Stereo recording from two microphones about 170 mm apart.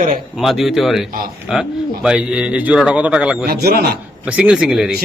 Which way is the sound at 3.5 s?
65° right (ahead or behind).